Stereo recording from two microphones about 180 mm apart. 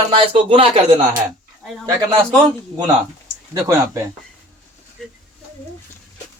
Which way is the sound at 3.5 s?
15° right (ahead or behind).